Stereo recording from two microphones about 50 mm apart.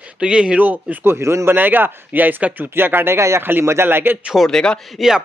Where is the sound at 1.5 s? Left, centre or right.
Right.